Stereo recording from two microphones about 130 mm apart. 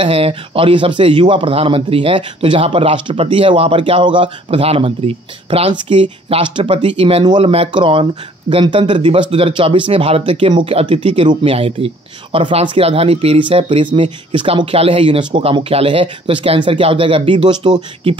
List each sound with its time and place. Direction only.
0.0 s speech: 45° right (ahead or behind)